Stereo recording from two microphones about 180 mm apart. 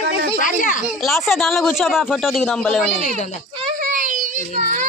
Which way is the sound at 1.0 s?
Centre (ahead or behind).